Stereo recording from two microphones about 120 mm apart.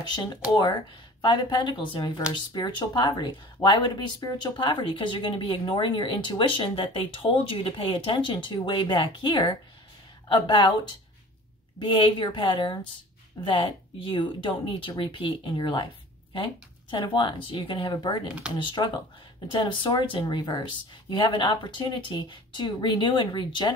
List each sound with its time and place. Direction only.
0.0 s speech: 40° left (ahead or behind)
11.8 s speech: 45° left (ahead or behind)
16.9 s speech: 45° left (ahead or behind)